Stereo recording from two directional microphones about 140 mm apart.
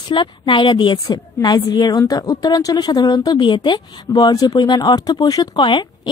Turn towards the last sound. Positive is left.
turn(degrees=35)  # may be behind; listen again after turning